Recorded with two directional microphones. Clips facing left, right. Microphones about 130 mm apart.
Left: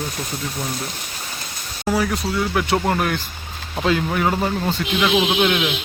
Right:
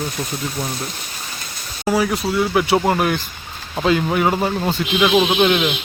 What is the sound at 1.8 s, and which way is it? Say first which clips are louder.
Speech: right 2 dB; 10° right (ahead or behind).